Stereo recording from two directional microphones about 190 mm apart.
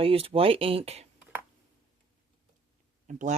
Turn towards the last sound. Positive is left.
turn(degrees=-40)  # may be behind; listen again after turning